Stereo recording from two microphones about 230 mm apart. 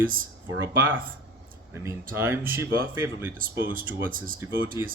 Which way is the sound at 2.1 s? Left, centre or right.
Centre.